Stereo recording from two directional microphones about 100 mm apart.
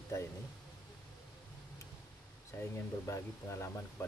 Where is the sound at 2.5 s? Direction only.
30° left (ahead or behind).